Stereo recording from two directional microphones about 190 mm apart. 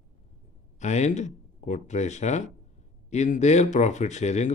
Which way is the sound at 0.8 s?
40° left (ahead or behind).